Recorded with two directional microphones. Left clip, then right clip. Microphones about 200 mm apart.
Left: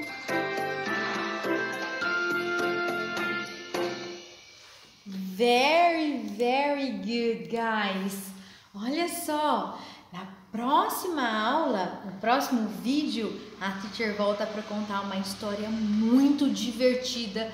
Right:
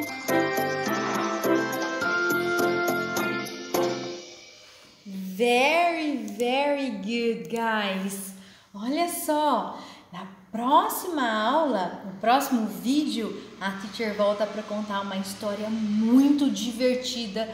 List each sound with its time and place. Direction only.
0.0 s music: 35° right (ahead or behind)
5.4 s a sound: 5° left (ahead or behind)
8.8 s a woman's voice: 5° left (ahead or behind)